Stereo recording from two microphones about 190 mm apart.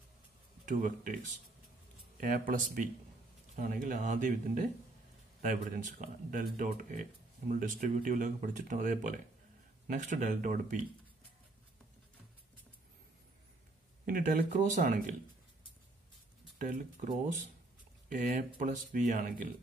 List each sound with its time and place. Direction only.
0.7 s speech: 45° right (ahead or behind)
14.0 s speech: 45° right (ahead or behind)
16.5 s speech: 45° right (ahead or behind)
18.1 s speech: 40° right (ahead or behind)